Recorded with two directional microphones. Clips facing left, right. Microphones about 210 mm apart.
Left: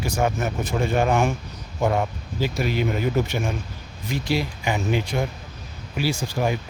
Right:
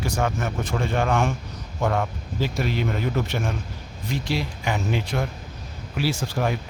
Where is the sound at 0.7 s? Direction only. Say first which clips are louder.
Left 3 dB; 20° left (ahead or behind).